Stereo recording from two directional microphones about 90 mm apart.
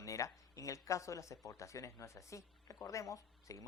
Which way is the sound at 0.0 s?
35° left (ahead or behind).